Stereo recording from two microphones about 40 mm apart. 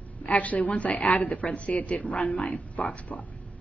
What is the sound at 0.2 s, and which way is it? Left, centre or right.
A woman's voice, left.